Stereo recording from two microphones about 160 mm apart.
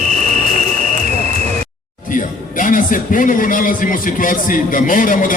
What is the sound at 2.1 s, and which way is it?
A man's voice, 55° left (ahead or behind).